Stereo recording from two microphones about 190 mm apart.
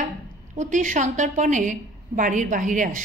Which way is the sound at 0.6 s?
40° right (ahead or behind).